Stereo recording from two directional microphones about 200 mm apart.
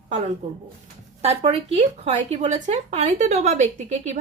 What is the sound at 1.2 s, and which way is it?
Speech, 30° right (ahead or behind).